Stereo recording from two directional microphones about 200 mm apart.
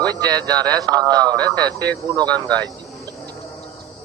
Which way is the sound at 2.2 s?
20° right (ahead or behind).